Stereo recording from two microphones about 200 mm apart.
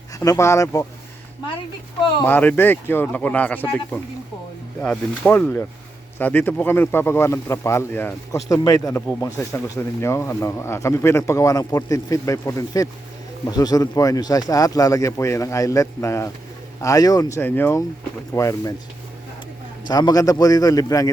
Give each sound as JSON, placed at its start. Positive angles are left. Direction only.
{"t": 0.2, "sound": "speech", "side_deg": 15}
{"t": 2.2, "sound": "speech", "side_deg": 10}
{"t": 19.9, "sound": "a man's voice", "side_deg": 20}